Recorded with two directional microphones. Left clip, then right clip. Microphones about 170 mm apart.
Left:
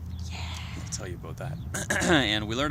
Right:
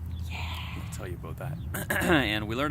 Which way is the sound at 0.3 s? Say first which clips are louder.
Right 2 dB; 5° right (ahead or behind).